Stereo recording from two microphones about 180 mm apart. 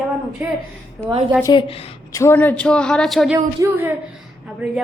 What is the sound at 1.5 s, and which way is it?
Speech, 30° left (ahead or behind).